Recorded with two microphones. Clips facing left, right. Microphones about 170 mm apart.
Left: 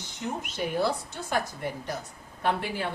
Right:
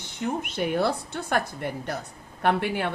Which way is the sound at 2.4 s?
65° right (ahead or behind).